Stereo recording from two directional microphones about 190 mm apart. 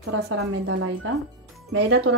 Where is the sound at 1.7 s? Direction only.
90° right.